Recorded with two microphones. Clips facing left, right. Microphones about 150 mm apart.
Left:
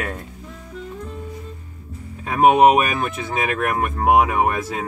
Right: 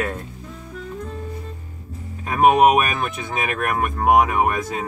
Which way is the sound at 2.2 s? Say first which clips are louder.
Left 1 dB; 25° left (ahead or behind).